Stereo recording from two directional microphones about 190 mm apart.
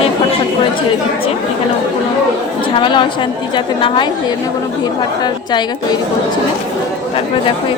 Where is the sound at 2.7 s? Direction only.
25° left (ahead or behind).